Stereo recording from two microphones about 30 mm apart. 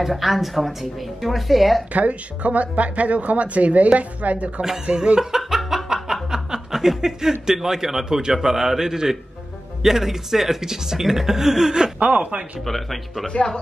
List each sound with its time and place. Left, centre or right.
0.0 s speech: centre
1.9 s speech: right
4.8 s speech: right
5.2 s a sound: centre
6.3 s speech: centre
12.0 s speech: right
12.6 s speech: centre